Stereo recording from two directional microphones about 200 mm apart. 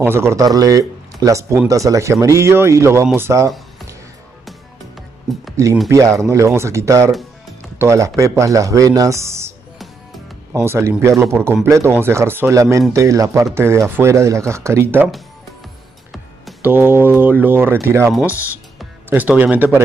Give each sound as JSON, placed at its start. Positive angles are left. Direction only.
{"t": 0.0, "sound": "speech", "side_deg": -10}
{"t": 5.3, "sound": "speech", "side_deg": 0}
{"t": 5.9, "sound": "speech", "side_deg": -15}
{"t": 7.1, "sound": "music", "side_deg": 0}
{"t": 7.8, "sound": "speech", "side_deg": -15}
{"t": 10.5, "sound": "speech", "side_deg": -15}
{"t": 16.1, "sound": "music", "side_deg": 0}
{"t": 16.7, "sound": "speech", "side_deg": -10}